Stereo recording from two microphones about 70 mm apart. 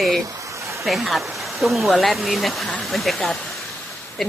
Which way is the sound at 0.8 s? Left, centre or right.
Centre.